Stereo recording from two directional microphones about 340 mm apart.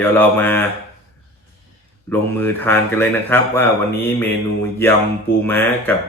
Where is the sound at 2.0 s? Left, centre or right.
Centre.